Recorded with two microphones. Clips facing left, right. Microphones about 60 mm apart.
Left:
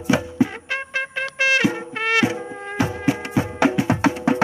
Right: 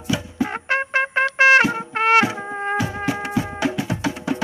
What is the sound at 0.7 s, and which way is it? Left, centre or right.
Trumpet, right.